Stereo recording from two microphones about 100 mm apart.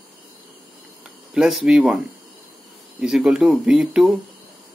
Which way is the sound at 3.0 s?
5° right (ahead or behind).